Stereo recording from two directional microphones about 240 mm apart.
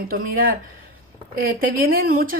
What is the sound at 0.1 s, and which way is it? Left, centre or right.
Speech, right.